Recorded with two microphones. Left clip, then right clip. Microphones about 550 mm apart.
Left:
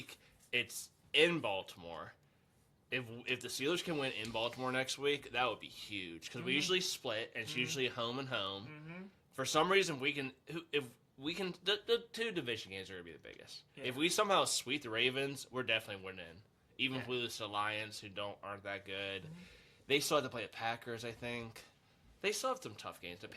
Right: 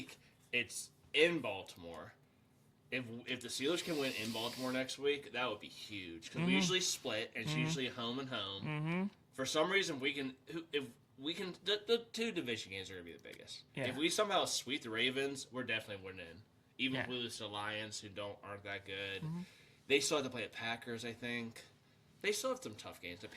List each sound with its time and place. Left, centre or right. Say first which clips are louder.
0.1 s a sound: left 1 dB; left
1.1 s a man's voice: left 1 dB; left
8.6 s speech: right 11 dB; right
9.3 s a man's voice: left 3 dB; left